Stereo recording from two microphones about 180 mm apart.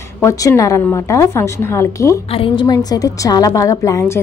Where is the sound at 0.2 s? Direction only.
15° left (ahead or behind).